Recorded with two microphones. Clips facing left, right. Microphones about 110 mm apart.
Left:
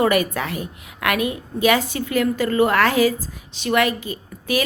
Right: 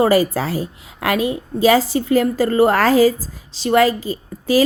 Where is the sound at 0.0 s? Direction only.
30° right (ahead or behind).